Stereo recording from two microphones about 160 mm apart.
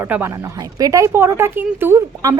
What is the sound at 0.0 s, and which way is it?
Speech, 15° right (ahead or behind).